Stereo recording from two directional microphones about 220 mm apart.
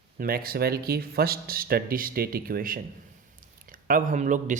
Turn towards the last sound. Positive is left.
turn(degrees=-35)  # may be behind; listen again after turning